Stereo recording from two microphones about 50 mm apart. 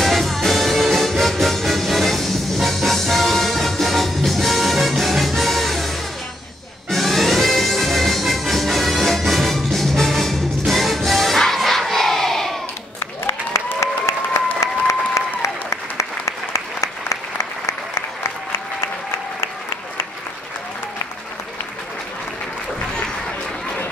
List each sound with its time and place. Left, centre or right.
0.0 s music: centre
14.0 s applause: left